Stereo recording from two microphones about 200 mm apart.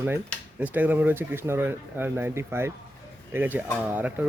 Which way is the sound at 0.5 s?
10° right (ahead or behind).